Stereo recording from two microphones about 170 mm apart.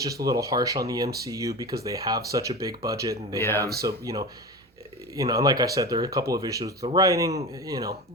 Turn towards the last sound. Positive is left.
turn(degrees=-20)  # may be behind; listen again after turning